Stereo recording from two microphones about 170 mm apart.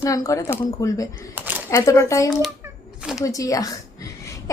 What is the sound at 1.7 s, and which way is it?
Speech, 20° left (ahead or behind).